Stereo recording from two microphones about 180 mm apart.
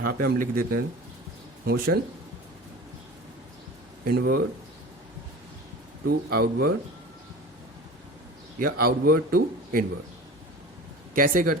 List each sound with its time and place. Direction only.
0.0 s speech: 55° right (ahead or behind)
4.0 s speech: 60° right (ahead or behind)
6.1 s speech: 60° right (ahead or behind)
8.5 s speech: 55° right (ahead or behind)
11.1 s speech: 50° right (ahead or behind)